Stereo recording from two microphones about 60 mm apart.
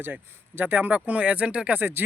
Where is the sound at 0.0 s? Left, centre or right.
Right.